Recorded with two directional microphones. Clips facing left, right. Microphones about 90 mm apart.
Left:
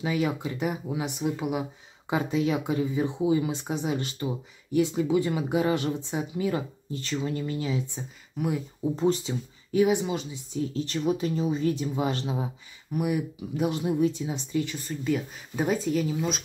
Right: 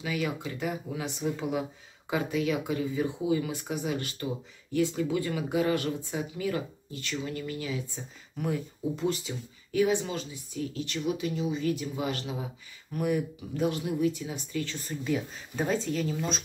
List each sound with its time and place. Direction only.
0.0 s speech: 30° left (ahead or behind)
8.4 s speech: 10° left (ahead or behind)
8.9 s speech: 35° left (ahead or behind)
12.9 s speech: 10° left (ahead or behind)
14.8 s speech: centre (ahead or behind)